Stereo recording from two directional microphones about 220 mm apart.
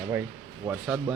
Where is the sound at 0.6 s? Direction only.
5° right (ahead or behind).